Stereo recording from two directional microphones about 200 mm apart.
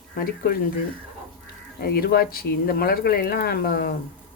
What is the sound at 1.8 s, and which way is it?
Speech, 50° left (ahead or behind).